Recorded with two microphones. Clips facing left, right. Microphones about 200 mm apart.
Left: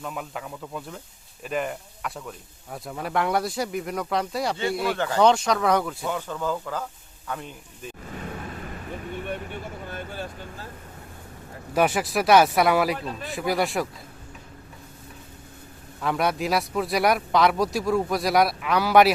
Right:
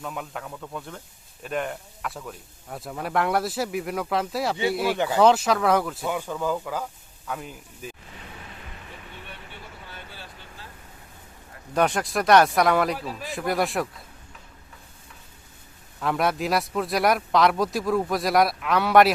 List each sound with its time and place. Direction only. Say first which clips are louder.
0.0 s speech: even; centre (ahead or behind)
6.1 s speech: right 1 dB; 15° right (ahead or behind)
8.2 s vehicle: left 9 dB; 50° left (ahead or behind)
11.7 s speech: left 1 dB; 5° left (ahead or behind)
16.0 s speech: even; centre (ahead or behind)